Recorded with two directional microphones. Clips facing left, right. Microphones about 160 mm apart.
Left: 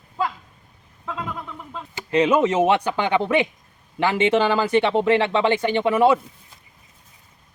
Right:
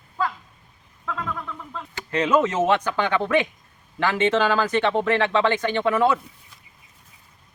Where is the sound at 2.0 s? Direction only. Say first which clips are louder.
Left 3 dB; 15° left (ahead or behind).